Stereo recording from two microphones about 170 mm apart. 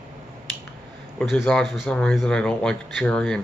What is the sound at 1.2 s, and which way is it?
Speech, centre (ahead or behind).